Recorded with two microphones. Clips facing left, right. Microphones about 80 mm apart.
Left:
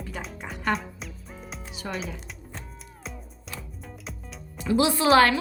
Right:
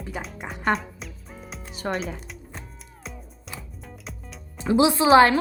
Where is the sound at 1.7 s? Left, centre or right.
Right.